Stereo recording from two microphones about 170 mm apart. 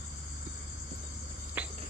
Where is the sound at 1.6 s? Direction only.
10° right (ahead or behind).